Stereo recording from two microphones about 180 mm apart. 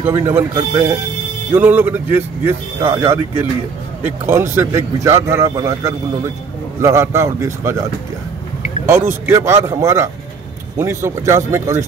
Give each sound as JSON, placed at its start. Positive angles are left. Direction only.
{"t": 0.0, "sound": "speech", "side_deg": -15}
{"t": 1.5, "sound": "speech", "side_deg": -10}
{"t": 8.8, "sound": "speech", "side_deg": -15}